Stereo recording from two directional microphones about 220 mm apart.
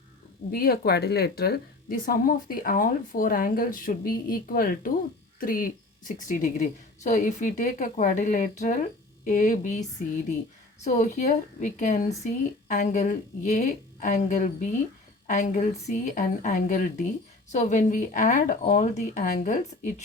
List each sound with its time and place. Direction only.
0.5 s a woman's voice: 45° left (ahead or behind)
10.8 s a woman's voice: 30° left (ahead or behind)